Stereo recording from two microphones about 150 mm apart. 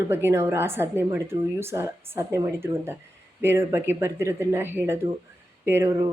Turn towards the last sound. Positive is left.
turn(degrees=-15)  # may be behind; listen again after turning